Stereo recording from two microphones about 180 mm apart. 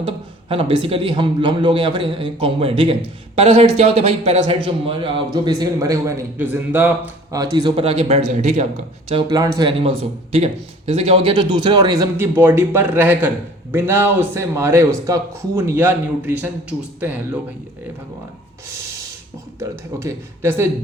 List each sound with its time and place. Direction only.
0.0 s a man's voice: 30° right (ahead or behind)
9.2 s speech: 20° right (ahead or behind)
19.5 s speech: 15° right (ahead or behind)